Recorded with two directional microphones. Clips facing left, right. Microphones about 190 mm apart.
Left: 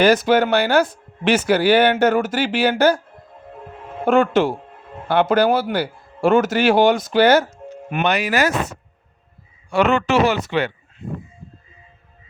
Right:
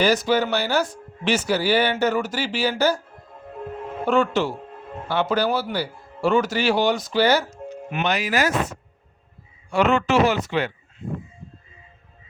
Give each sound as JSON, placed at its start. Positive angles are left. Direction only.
{"t": 0.0, "sound": "speech", "side_deg": 55}
{"t": 4.0, "sound": "speech", "side_deg": 55}